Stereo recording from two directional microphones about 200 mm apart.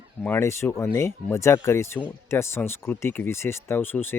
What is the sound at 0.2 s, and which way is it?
Speech, 10° left (ahead or behind).